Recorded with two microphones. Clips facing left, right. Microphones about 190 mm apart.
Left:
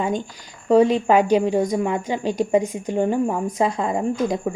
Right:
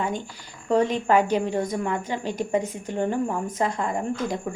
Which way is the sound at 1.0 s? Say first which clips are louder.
Left 4 dB; 15° left (ahead or behind).